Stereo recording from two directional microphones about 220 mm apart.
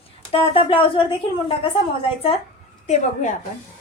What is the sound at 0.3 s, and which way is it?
Speech, 25° left (ahead or behind).